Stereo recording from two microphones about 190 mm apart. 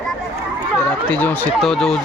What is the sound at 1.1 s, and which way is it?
Speech, 10° left (ahead or behind).